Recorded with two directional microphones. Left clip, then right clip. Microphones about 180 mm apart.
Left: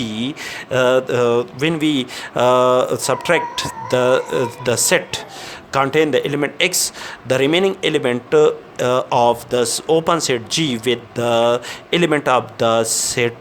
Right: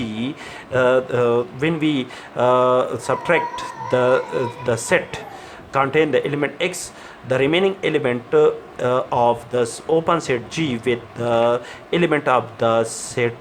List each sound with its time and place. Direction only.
0.0 s speech: 55° left (ahead or behind)